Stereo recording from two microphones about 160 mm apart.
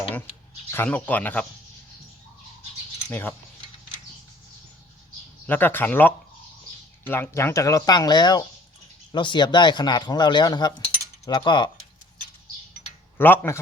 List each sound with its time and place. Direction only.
0.7 s speech: 10° left (ahead or behind)
3.1 s speech: 10° left (ahead or behind)
5.5 s speech: 15° left (ahead or behind); by 11.7 s 30° left (ahead or behind)
13.1 s speech: 10° left (ahead or behind)